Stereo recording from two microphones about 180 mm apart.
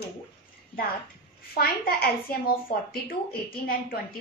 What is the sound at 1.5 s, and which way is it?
A woman's voice, 55° left (ahead or behind).